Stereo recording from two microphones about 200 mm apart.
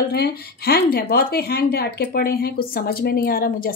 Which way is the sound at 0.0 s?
50° left (ahead or behind).